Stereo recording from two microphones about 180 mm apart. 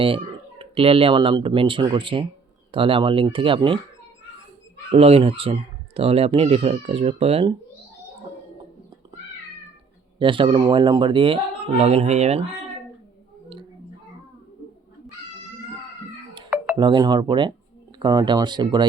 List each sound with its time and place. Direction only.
0.6 s speech: 30° right (ahead or behind)
4.9 s speech: 35° right (ahead or behind)
10.2 s speech: 30° right (ahead or behind)
16.7 s speech: 25° right (ahead or behind)